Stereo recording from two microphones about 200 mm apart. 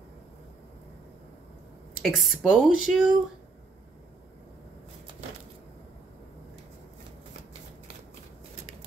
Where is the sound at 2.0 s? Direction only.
Centre (ahead or behind).